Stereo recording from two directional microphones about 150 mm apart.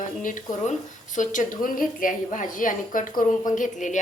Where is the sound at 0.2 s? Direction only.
60° left (ahead or behind).